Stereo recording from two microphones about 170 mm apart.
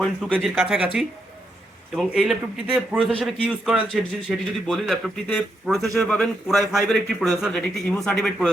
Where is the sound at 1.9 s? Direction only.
5° right (ahead or behind).